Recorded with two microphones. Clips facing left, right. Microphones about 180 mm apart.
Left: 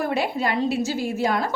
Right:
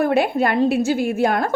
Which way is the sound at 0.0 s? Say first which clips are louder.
Right 6 dB; 55° right (ahead or behind).